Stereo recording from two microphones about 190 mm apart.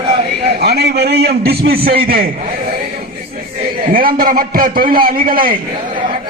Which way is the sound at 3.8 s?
50° right (ahead or behind).